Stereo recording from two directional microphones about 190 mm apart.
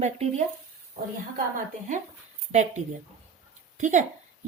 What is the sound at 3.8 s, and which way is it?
Speech, 40° right (ahead or behind).